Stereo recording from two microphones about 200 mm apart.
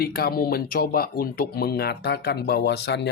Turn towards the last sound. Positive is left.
turn(degrees=60)  # may be behind; listen again after turning